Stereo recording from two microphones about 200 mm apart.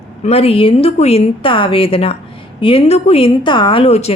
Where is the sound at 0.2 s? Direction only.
30° left (ahead or behind).